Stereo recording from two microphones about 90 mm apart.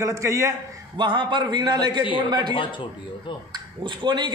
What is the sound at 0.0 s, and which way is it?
Speech, 35° right (ahead or behind).